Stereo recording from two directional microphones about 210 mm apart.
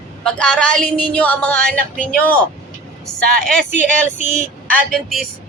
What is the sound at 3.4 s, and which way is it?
Speech, 5° left (ahead or behind).